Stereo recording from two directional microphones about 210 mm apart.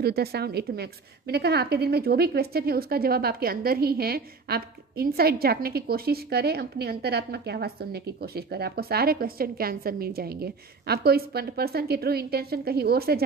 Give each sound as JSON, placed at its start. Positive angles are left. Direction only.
{"t": 0.0, "sound": "a woman's voice", "side_deg": -50}